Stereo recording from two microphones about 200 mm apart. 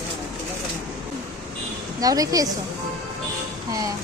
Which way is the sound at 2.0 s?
20° right (ahead or behind).